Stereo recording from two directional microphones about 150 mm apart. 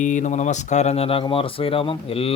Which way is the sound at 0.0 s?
55° left (ahead or behind).